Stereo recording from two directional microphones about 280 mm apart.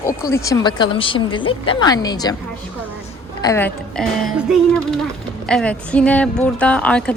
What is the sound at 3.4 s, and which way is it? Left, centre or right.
A woman's voice, centre.